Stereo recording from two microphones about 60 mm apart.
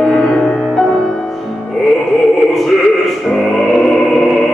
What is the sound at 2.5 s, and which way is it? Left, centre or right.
Music, centre.